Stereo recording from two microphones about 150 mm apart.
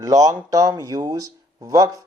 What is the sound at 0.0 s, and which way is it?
Speech, 20° right (ahead or behind).